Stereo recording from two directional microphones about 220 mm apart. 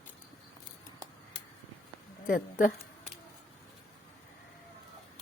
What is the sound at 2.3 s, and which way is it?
Speech, 40° left (ahead or behind).